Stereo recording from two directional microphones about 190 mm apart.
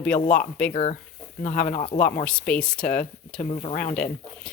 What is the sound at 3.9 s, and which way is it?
Speech, 5° left (ahead or behind).